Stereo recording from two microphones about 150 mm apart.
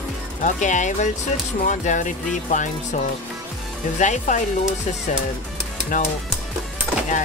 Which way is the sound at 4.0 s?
55° left (ahead or behind).